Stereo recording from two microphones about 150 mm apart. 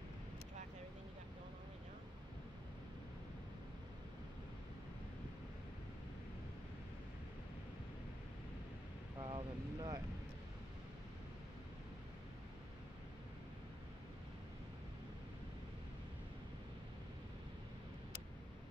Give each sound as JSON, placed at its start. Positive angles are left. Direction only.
{"t": 9.2, "sound": "vehicle", "side_deg": -30}